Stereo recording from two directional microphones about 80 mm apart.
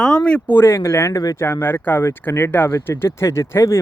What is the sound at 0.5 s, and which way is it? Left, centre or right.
Speech, left.